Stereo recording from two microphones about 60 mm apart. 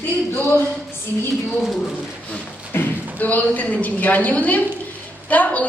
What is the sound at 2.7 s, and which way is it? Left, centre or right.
A woman's voice, left.